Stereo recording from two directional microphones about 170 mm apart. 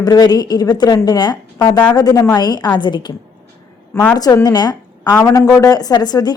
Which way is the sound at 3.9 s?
10° left (ahead or behind).